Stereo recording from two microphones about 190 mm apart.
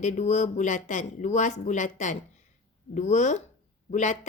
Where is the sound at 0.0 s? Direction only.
40° left (ahead or behind).